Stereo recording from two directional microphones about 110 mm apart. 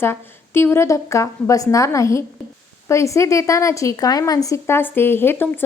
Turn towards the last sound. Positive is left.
turn(degrees=20)  # may be behind; listen again after turning